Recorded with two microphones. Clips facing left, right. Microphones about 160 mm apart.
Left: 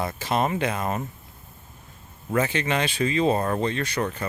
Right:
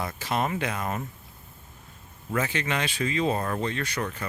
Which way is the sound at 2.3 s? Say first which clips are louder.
Left 4 dB; 30° left (ahead or behind).